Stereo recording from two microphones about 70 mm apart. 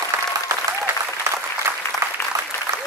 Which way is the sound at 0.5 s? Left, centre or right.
Right.